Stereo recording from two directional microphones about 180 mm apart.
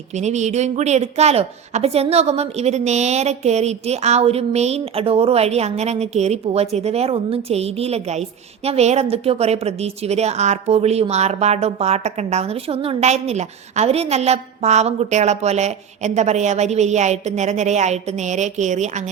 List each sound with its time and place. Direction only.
0.2 s a woman's voice: 40° right (ahead or behind)